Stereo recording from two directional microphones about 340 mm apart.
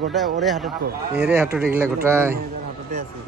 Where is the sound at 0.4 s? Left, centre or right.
Centre.